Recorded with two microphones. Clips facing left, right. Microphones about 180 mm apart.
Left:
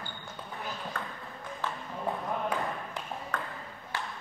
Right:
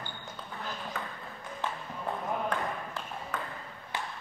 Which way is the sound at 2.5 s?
5° left (ahead or behind).